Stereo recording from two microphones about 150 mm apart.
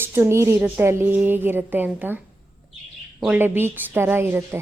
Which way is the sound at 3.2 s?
10° right (ahead or behind).